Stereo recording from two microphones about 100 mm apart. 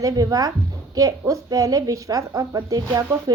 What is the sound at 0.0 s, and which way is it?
A woman's voice, 35° right (ahead or behind).